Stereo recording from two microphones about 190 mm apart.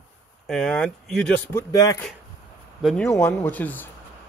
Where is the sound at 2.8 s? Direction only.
Centre (ahead or behind).